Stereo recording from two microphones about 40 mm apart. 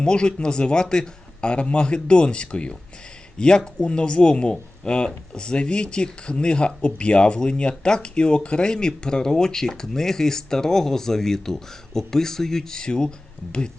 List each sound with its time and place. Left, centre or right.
0.0 s speech: left